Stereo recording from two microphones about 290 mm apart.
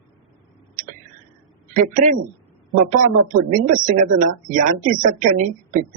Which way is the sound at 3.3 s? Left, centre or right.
Right.